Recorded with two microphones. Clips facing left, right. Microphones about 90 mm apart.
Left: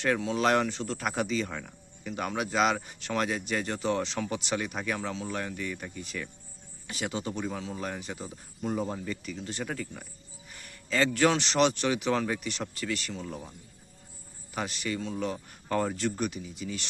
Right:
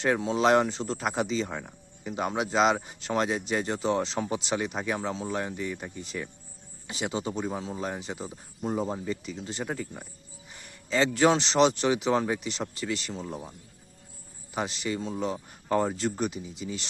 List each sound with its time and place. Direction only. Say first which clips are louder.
0.0 s speech: right 2 dB; 30° right (ahead or behind); by 10.1 s 10° right (ahead or behind)
10.5 s speech: right 2 dB; 25° right (ahead or behind)
13.2 s speech: right 2 dB; 15° right (ahead or behind)
14.5 s speech: right 2 dB; 25° right (ahead or behind)